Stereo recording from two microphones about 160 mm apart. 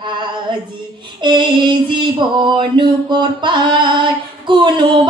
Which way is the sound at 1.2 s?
30° right (ahead or behind).